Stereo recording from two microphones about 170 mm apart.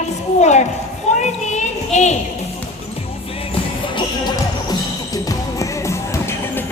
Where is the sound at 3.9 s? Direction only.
25° left (ahead or behind).